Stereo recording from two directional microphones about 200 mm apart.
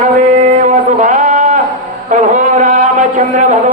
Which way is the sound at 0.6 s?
40° right (ahead or behind).